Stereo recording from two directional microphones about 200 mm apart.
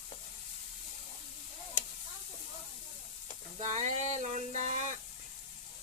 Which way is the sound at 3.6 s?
35° right (ahead or behind).